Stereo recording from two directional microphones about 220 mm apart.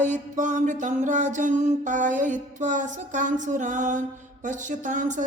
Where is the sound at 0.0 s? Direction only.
35° right (ahead or behind).